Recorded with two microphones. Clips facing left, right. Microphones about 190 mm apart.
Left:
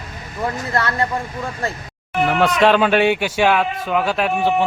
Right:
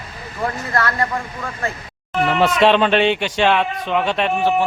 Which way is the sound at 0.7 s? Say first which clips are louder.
Even; 20° left (ahead or behind).